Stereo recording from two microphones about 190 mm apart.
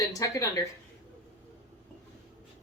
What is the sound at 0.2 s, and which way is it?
Speech, 15° left (ahead or behind).